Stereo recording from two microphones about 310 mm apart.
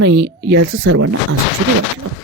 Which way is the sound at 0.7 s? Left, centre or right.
Right.